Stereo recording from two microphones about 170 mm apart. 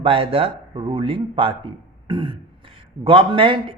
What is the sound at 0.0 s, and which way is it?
A man's voice, 35° right (ahead or behind).